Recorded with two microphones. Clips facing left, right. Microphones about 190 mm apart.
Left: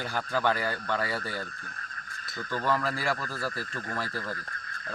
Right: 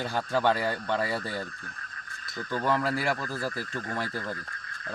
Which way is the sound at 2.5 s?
15° right (ahead or behind).